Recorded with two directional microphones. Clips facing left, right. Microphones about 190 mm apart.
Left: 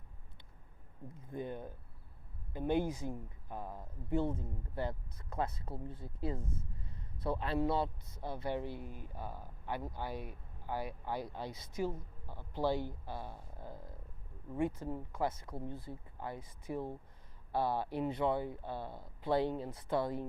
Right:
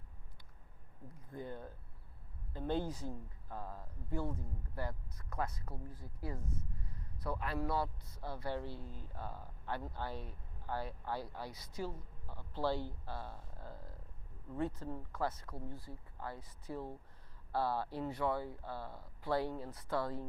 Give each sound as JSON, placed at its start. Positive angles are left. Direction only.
{"t": 1.0, "sound": "a man's voice", "side_deg": 20}